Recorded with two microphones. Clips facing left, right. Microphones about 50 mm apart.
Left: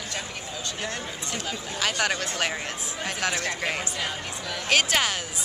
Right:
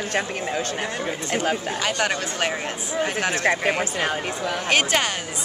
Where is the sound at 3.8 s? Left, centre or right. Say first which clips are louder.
Right 7 dB; right.